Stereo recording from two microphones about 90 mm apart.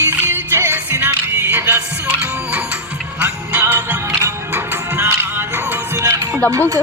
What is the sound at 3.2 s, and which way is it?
Music, 25° right (ahead or behind).